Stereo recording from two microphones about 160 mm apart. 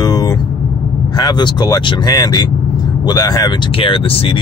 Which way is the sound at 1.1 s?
25° left (ahead or behind).